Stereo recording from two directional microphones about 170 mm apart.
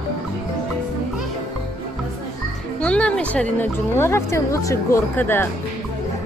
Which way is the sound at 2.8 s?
5° left (ahead or behind).